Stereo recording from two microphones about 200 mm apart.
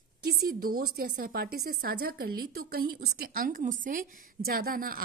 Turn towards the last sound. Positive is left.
turn(degrees=-45)  # may be behind; listen again after turning